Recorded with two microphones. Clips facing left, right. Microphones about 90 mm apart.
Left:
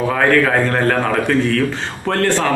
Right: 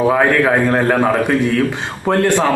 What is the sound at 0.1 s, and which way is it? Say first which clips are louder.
A man's voice: right 1 dB; 15° right (ahead or behind).